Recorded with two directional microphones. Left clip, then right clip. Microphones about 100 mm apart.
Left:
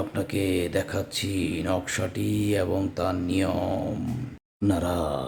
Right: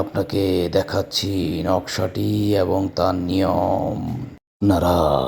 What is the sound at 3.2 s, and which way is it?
Speech, 40° right (ahead or behind).